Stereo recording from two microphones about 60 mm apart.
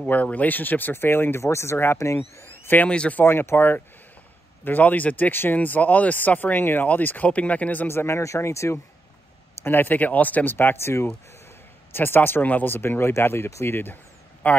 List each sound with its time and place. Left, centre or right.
0.0 s speech: left
1.4 s speech: left
2.9 s speech: centre
3.2 s speech: left
7.9 s speech: left
8.2 s speech: left
9.6 s speech: left
14.4 s speech: left